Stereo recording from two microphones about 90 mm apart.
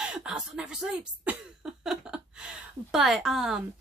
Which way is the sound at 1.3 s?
20° right (ahead or behind).